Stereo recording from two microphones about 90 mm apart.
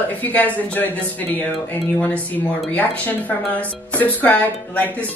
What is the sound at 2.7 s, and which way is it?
Speech, 20° left (ahead or behind).